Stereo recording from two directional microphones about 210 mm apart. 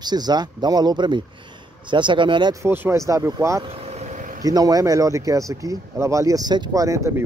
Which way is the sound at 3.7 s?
30° right (ahead or behind).